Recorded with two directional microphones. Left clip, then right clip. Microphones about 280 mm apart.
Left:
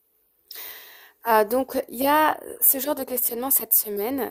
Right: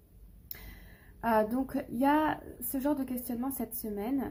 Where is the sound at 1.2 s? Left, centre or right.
Left.